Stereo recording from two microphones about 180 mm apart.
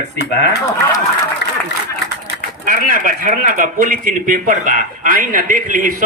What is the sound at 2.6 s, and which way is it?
A man's voice, 50° right (ahead or behind).